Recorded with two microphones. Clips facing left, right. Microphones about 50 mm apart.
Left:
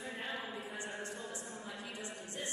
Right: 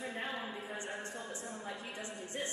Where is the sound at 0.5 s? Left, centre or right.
Right.